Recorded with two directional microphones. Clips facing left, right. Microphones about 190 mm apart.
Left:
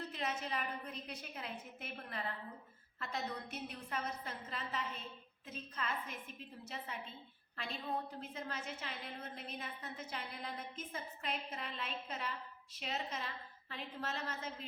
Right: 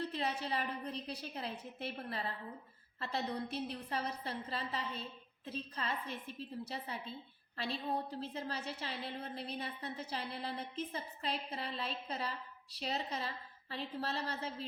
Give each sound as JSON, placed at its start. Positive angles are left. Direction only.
{"t": 0.1, "sound": "a woman's voice", "side_deg": -35}